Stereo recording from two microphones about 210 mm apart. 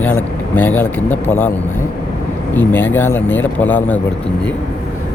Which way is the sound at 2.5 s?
10° left (ahead or behind).